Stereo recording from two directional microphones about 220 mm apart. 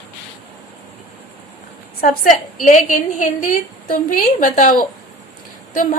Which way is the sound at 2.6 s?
35° left (ahead or behind).